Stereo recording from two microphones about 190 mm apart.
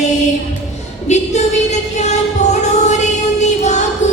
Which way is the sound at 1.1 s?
35° left (ahead or behind).